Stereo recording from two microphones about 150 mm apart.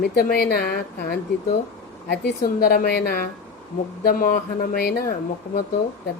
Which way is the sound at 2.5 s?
90° left.